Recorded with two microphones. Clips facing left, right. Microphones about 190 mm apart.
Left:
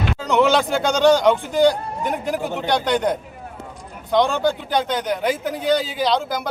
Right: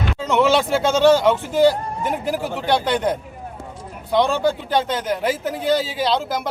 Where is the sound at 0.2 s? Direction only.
Centre (ahead or behind).